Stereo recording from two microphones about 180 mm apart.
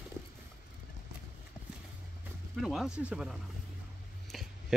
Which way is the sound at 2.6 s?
Centre (ahead or behind).